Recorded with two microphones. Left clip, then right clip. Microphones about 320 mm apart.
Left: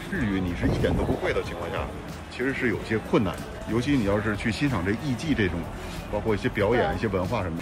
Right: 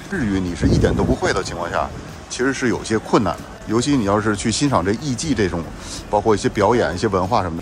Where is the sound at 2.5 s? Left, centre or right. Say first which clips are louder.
Right 5 dB; right.